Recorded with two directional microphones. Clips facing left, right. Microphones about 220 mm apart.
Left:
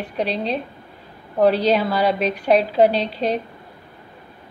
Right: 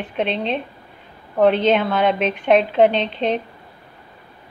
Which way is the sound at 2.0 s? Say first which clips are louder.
Right 1 dB; 35° left (ahead or behind).